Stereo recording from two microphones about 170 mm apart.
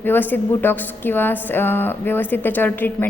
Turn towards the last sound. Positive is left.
turn(degrees=10)  # may be behind; listen again after turning